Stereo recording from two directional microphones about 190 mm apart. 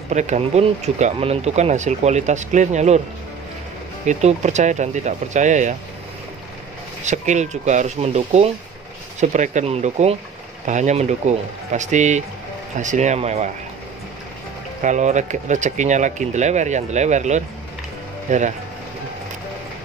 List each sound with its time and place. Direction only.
0.1 s speech: 40° right (ahead or behind)
4.0 s speech: 35° right (ahead or behind)
7.1 s speech: 40° right (ahead or behind)
14.8 s speech: 40° right (ahead or behind)